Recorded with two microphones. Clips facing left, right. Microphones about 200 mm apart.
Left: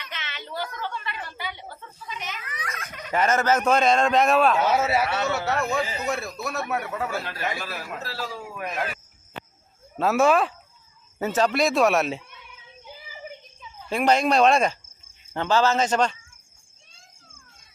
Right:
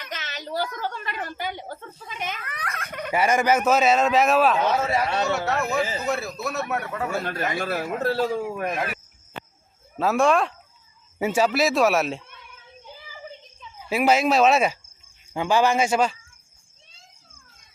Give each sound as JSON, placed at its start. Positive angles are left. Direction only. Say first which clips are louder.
{"t": 0.0, "sound": "a woman's voice", "louder": "right 4 dB", "side_deg": -40}
{"t": 3.1, "sound": "a man's voice", "louder": "right 1 dB", "side_deg": -10}
{"t": 7.3, "sound": "a man's voice", "louder": "right 5 dB", "side_deg": -50}
{"t": 10.0, "sound": "speech", "louder": "even", "side_deg": 0}
{"t": 11.2, "sound": "speech", "louder": "right 1 dB", "side_deg": -10}
{"t": 12.8, "sound": "a sound", "louder": "left 1 dB", "side_deg": 15}
{"t": 13.7, "sound": "speech", "louder": "right 1 dB", "side_deg": -5}